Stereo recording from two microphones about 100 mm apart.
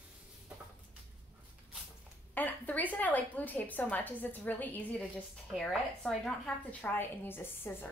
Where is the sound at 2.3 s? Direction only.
15° left (ahead or behind).